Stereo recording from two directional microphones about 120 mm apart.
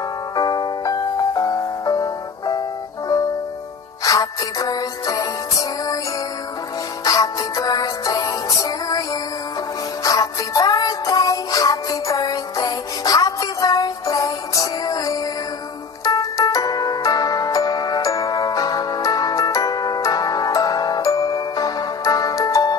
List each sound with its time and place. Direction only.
0.4 s music: 35° left (ahead or behind)
4.0 s music: 30° left (ahead or behind)
7.1 s music: 30° left (ahead or behind)
10.0 s music: 30° left (ahead or behind)